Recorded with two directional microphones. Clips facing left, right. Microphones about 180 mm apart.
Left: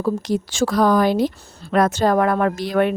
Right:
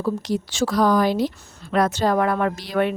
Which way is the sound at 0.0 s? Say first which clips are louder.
Left 3 dB; 50° left (ahead or behind).